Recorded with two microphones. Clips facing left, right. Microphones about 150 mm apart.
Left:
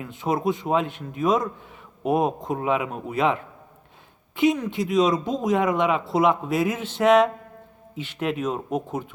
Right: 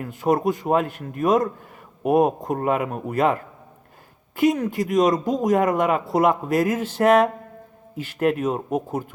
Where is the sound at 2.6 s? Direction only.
50° right (ahead or behind).